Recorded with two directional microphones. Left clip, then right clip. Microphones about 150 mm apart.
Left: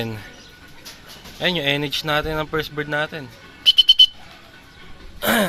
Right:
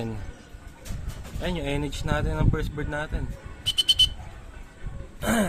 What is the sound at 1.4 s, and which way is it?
Speech, 35° left (ahead or behind).